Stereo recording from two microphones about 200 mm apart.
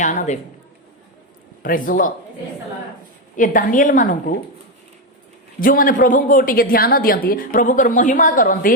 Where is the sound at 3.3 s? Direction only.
40° left (ahead or behind).